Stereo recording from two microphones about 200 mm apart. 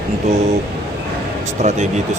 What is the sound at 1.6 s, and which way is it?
Speech, 35° right (ahead or behind).